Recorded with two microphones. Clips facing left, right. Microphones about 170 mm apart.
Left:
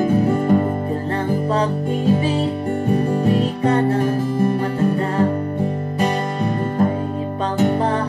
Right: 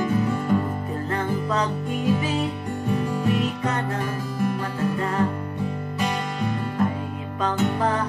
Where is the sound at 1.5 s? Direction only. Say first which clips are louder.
Left 5 dB; 30° left (ahead or behind).